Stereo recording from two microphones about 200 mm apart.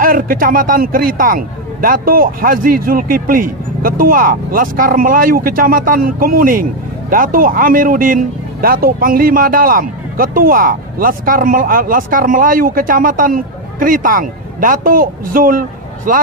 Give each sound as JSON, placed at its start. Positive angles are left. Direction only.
{"t": 0.0, "sound": "a man's voice", "side_deg": -45}